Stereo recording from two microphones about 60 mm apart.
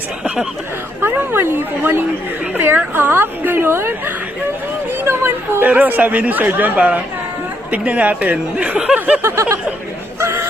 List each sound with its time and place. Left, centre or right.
1.0 s a woman's voice: right
9.0 s a sound: right
9.2 s speech: right